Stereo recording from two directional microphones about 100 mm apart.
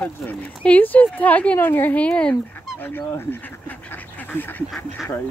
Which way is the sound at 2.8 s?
20° left (ahead or behind).